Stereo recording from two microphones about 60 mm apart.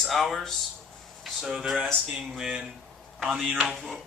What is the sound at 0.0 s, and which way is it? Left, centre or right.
Speech, centre.